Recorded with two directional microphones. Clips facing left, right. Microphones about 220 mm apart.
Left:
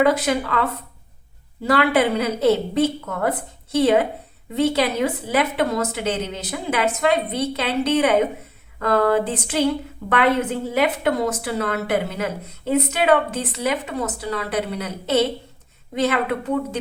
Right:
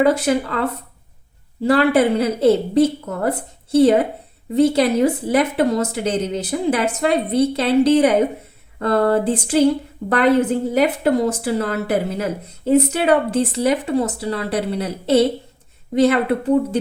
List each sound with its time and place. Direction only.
0.0 s a woman's voice: 30° right (ahead or behind)